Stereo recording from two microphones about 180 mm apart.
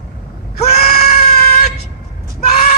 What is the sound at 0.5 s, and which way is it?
Screaming, 40° left (ahead or behind).